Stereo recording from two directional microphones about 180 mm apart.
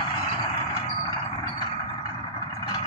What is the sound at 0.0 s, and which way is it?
Vehicle, 25° left (ahead or behind).